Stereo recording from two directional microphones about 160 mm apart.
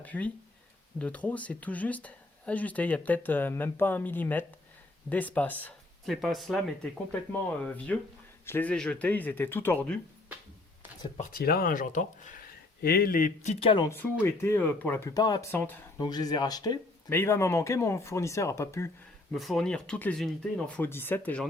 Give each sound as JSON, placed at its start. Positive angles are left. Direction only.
{"t": 0.0, "sound": "speech", "side_deg": 10}
{"t": 6.2, "sound": "speech", "side_deg": 0}
{"t": 11.2, "sound": "speech", "side_deg": 65}
{"t": 12.8, "sound": "speech", "side_deg": 70}
{"t": 13.7, "sound": "speech", "side_deg": 30}
{"t": 13.9, "sound": "speech", "side_deg": 15}
{"t": 19.3, "sound": "speech", "side_deg": 0}